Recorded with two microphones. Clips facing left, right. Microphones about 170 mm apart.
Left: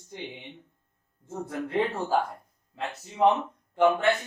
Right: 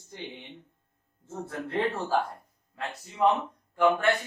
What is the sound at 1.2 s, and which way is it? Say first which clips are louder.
Speech: left 3 dB; 15° left (ahead or behind).